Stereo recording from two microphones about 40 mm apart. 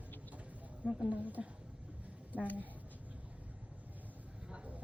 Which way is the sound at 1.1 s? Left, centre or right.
Right.